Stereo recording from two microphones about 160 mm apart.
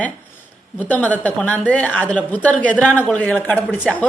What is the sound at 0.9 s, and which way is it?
A woman's voice, 10° left (ahead or behind).